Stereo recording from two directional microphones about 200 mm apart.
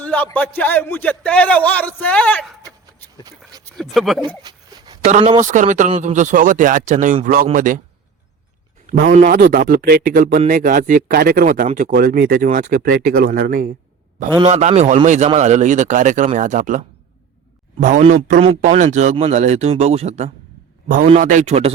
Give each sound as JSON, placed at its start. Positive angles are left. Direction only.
{"t": 0.0, "sound": "speech", "side_deg": 5}
{"t": 3.7, "sound": "speech", "side_deg": 0}
{"t": 4.4, "sound": "a sound", "side_deg": -20}
{"t": 5.0, "sound": "a man's voice", "side_deg": -35}
{"t": 9.1, "sound": "speech", "side_deg": -40}
{"t": 14.4, "sound": "a man's voice", "side_deg": -35}